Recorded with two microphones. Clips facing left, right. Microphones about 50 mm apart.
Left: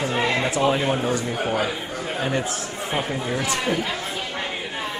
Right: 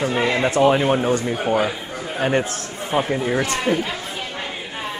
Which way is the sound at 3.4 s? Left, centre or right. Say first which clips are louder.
Right 3 dB; right.